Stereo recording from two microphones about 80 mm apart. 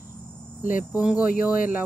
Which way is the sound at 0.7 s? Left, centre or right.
Centre.